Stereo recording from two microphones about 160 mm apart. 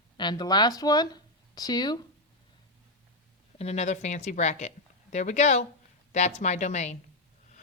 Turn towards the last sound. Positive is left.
turn(degrees=45)  # may be behind; listen again after turning